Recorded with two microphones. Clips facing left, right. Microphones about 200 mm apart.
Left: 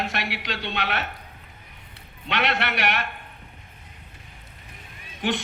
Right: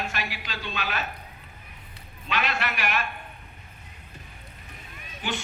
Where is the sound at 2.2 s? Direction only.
70° left (ahead or behind).